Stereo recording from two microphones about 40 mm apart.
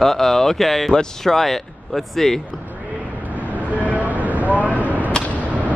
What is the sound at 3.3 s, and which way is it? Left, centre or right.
Vehicle, right.